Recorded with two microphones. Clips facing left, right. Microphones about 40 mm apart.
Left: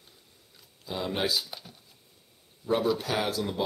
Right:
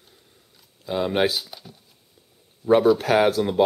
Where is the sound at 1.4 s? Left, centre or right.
Centre.